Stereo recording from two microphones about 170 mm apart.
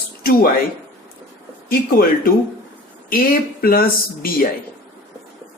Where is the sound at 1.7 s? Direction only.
60° left (ahead or behind).